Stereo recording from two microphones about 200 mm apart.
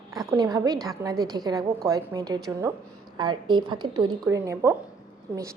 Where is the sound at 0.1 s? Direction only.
15° right (ahead or behind).